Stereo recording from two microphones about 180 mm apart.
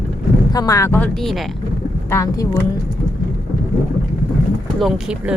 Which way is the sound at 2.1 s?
15° left (ahead or behind).